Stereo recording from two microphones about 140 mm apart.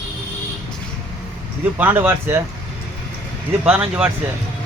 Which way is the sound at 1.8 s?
15° right (ahead or behind).